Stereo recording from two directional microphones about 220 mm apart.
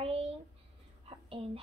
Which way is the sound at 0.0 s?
25° right (ahead or behind).